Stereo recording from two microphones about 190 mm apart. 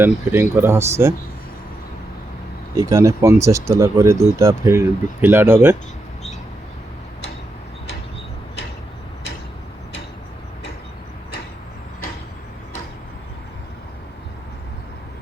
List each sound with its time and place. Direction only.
0.0 s speech: 10° right (ahead or behind)
2.7 s speech: 15° right (ahead or behind)